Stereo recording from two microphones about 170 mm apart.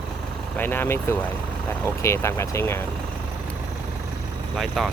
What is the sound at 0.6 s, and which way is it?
Speech, 10° left (ahead or behind).